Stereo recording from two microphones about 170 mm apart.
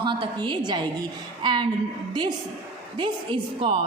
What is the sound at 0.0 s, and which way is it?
A woman's voice, 30° right (ahead or behind).